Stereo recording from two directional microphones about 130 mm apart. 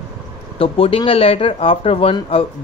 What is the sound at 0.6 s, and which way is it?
Speech, 45° left (ahead or behind).